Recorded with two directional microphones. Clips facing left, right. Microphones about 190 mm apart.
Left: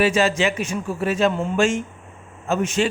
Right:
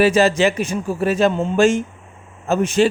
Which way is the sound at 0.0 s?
40° right (ahead or behind).